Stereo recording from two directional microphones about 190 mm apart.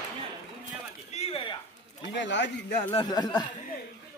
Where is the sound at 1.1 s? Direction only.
30° left (ahead or behind).